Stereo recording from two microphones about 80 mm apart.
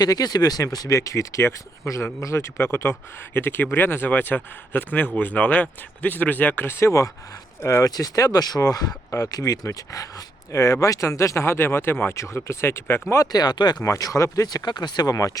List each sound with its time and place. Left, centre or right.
0.0 s speech: left
7.9 s speech: left
13.3 s speech: left
13.8 s speech: left